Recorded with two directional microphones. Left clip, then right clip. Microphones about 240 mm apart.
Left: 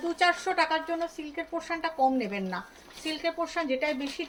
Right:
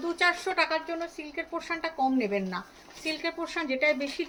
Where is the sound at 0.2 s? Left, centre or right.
Centre.